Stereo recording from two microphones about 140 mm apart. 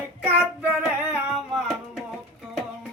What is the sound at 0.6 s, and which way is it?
Singing, 5° right (ahead or behind).